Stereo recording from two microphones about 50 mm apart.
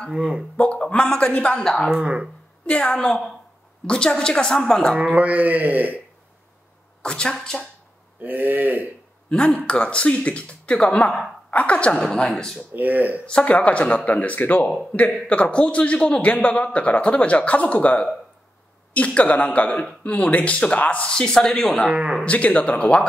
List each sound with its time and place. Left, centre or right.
0.6 s a man's voice: left
1.6 s a woman's voice: centre
4.9 s speech: right
7.0 s speech: centre
8.2 s speech: right
9.7 s a man's voice: left
11.9 s a woman's voice: centre
12.7 s speech: right
13.3 s a man's voice: left
15.0 s a man's voice: left
21.1 s a woman's voice: centre
21.8 s speech: right
22.2 s a man's voice: left